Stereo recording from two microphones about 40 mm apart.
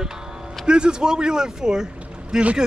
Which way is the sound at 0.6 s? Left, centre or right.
Right.